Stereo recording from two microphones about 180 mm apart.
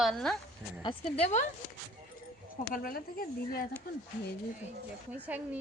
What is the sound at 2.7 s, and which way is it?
Speech, 55° left (ahead or behind).